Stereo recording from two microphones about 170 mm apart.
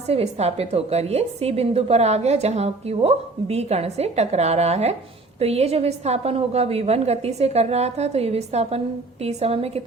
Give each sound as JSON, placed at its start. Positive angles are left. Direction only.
{"t": 0.1, "sound": "a woman's voice", "side_deg": -35}